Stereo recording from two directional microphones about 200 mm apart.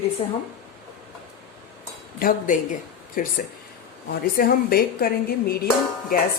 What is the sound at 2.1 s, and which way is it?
A woman's voice, 45° left (ahead or behind).